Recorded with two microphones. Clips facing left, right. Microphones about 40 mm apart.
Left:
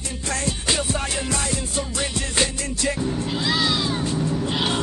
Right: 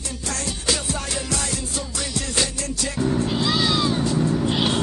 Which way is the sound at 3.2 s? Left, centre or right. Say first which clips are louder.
Right 1 dB; centre.